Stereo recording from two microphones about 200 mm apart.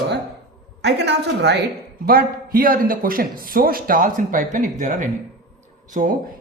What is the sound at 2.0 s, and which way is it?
A man's voice, 45° right (ahead or behind).